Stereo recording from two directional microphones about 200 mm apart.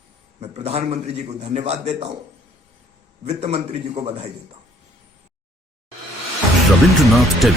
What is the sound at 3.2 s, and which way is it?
Speech, 30° right (ahead or behind).